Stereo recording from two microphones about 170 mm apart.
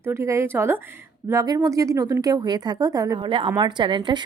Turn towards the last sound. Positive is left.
turn(degrees=-30)  # may be behind; listen again after turning